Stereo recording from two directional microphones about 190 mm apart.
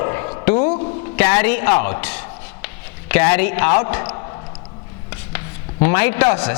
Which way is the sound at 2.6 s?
10° left (ahead or behind).